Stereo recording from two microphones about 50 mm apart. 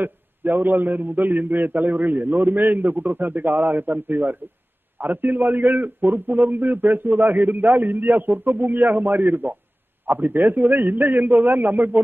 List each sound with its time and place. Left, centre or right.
0.0 s a man's voice: right